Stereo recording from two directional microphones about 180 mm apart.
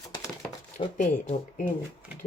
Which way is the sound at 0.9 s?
50° left (ahead or behind).